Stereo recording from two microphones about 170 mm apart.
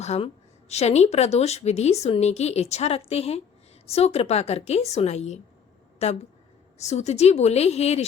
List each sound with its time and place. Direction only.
0.0 s a woman's voice: 40° left (ahead or behind)